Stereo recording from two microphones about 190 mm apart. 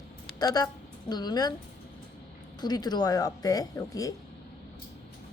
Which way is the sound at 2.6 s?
20° left (ahead or behind).